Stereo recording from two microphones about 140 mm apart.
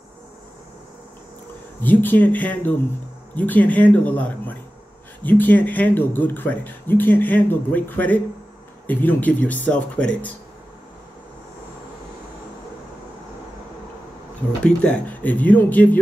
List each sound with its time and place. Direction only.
1.8 s speech: 15° left (ahead or behind)
14.6 s speech: 10° left (ahead or behind)